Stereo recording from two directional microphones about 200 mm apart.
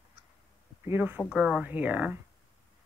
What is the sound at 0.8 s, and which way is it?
A woman's voice, 10° right (ahead or behind).